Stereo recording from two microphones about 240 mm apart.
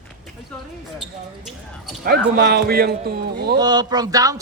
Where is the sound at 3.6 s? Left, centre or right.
Centre.